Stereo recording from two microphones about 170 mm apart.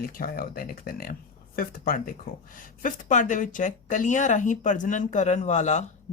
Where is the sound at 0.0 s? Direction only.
60° left (ahead or behind).